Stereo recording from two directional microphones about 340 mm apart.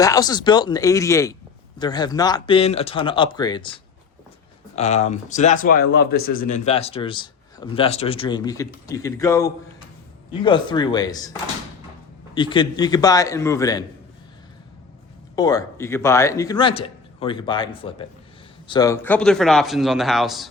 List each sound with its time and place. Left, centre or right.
0.0 s speech: centre
12.3 s speech: centre
15.4 s a man's voice: centre